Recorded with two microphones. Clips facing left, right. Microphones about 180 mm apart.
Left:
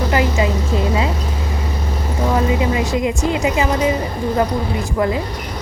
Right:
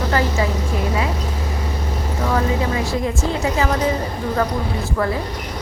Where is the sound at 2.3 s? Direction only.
15° left (ahead or behind).